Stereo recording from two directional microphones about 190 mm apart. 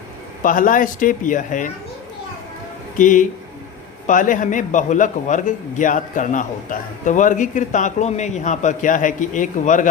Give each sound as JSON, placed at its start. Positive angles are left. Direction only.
{"t": 0.4, "sound": "speech", "side_deg": 45}
{"t": 3.0, "sound": "a man's voice", "side_deg": 45}